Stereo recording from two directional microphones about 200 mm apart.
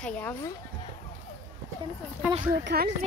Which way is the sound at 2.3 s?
45° right (ahead or behind).